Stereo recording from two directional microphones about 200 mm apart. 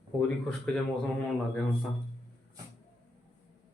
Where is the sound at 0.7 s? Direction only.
5° left (ahead or behind).